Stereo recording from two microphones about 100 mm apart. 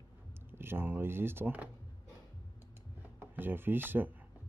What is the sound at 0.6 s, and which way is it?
Speech, 20° right (ahead or behind).